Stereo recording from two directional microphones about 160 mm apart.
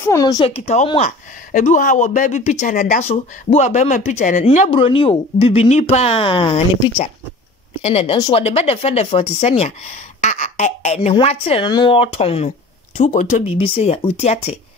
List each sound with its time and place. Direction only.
0.0 s speech: 20° left (ahead or behind)
0.5 s speech: 40° left (ahead or behind)
4.5 s speech: 35° left (ahead or behind)
13.6 s speech: 40° left (ahead or behind)